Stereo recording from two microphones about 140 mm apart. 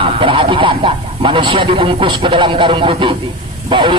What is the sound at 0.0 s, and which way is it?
Speech, 40° right (ahead or behind).